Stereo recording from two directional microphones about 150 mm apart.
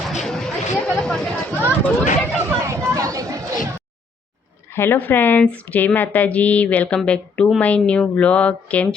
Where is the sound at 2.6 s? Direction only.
20° right (ahead or behind).